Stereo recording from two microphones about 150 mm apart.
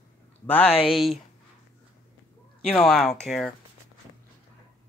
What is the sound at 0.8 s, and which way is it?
Speech, centre (ahead or behind).